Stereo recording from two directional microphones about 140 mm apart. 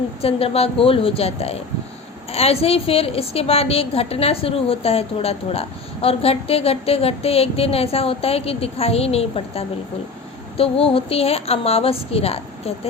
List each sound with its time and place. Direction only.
0.2 s a woman's voice: 45° left (ahead or behind)